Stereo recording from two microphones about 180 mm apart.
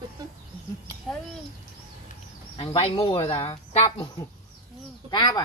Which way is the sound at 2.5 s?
30° left (ahead or behind).